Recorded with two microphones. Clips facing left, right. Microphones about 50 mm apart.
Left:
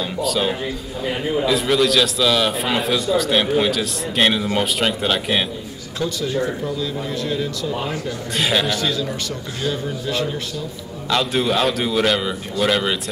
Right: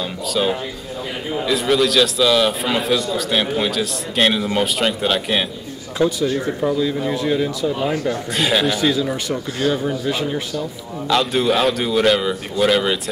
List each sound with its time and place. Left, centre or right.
0.0 s a man's voice: centre
5.9 s a man's voice: centre
7.8 s a man's voice: centre
11.1 s a man's voice: centre